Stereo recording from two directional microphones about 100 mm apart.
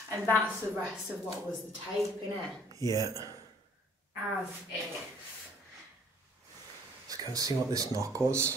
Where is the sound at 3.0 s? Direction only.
35° right (ahead or behind).